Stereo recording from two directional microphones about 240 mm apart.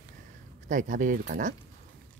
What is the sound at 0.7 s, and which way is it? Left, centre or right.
Speech, right.